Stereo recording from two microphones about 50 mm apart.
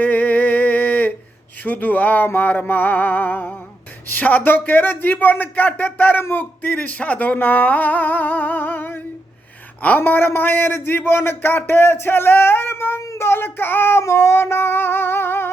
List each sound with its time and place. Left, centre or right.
0.0 s a sound: left
1.6 s speech: left
6.6 s speech: left
10.0 s speech: left
13.0 s a sound: left
13.2 s speech: left
14.0 s speech: left